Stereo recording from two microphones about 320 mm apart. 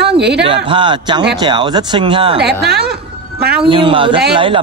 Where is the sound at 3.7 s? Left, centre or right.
Centre.